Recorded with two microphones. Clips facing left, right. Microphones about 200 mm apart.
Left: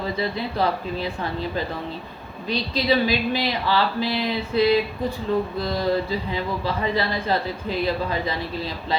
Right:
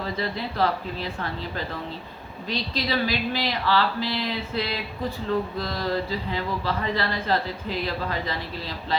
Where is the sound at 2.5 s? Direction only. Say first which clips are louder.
Left 5 dB; 15° left (ahead or behind).